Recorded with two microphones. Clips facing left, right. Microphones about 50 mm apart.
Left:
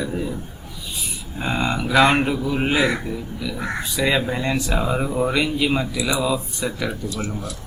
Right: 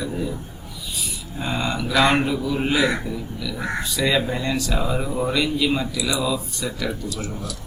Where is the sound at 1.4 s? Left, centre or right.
Left.